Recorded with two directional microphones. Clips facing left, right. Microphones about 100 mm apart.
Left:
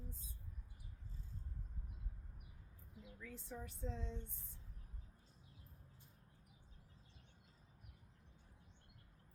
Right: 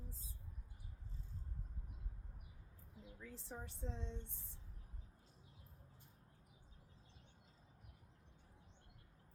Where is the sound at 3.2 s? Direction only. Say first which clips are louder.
Left 1 dB; 30° right (ahead or behind).